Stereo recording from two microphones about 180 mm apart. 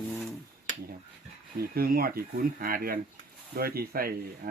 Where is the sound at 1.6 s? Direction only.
55° right (ahead or behind).